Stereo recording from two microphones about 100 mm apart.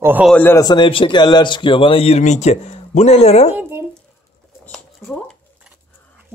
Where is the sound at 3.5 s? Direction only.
25° right (ahead or behind).